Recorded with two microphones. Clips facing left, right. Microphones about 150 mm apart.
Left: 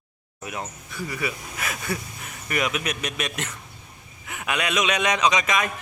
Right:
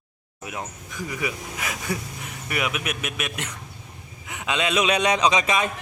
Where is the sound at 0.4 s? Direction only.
15° right (ahead or behind).